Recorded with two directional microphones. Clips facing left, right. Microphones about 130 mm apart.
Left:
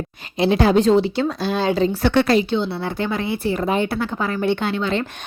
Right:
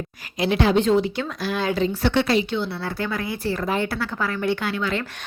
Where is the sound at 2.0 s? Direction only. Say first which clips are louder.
Left 3 dB; 55° left (ahead or behind).